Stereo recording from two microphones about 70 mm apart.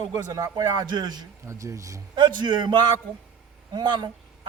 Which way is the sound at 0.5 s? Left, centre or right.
Right.